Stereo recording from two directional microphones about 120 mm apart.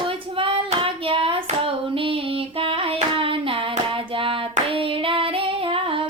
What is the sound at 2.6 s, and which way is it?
Hands, 50° right (ahead or behind).